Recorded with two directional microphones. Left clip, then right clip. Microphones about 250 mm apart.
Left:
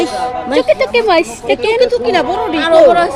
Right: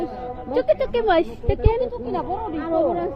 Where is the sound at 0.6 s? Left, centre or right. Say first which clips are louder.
Left 8 dB; centre.